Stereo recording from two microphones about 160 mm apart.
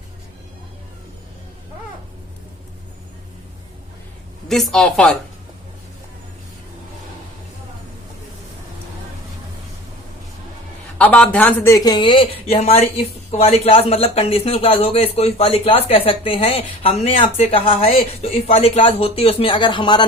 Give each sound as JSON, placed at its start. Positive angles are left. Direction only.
{"t": 4.4, "sound": "speech", "side_deg": 5}
{"t": 10.9, "sound": "speech", "side_deg": 10}